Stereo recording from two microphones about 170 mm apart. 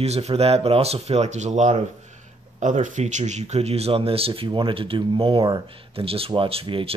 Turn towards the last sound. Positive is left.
turn(degrees=-35)  # may be behind; listen again after turning